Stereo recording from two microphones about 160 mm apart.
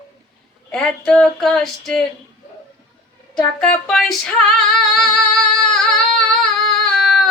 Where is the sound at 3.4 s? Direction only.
Centre (ahead or behind).